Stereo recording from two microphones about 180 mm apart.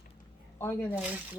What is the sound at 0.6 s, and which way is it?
Speech, 10° left (ahead or behind).